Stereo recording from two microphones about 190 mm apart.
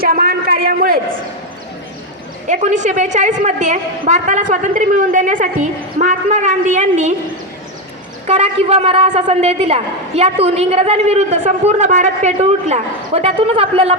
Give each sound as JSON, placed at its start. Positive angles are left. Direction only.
{"t": 0.0, "sound": "a sound", "side_deg": -50}
{"t": 2.5, "sound": "a woman's voice", "side_deg": -40}
{"t": 8.3, "sound": "a woman's voice", "side_deg": -35}